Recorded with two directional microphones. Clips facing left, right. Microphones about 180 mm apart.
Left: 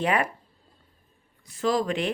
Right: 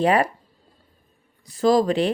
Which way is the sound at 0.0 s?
35° right (ahead or behind).